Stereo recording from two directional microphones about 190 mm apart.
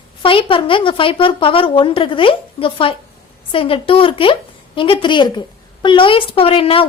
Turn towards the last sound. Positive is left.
turn(degrees=30)  # may be behind; listen again after turning